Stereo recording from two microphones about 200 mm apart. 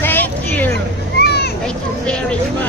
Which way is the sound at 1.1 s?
55° left (ahead or behind).